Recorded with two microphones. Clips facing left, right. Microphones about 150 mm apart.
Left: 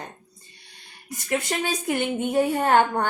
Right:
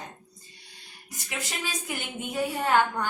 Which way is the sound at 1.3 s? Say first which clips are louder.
Left 9 dB; 60° left (ahead or behind).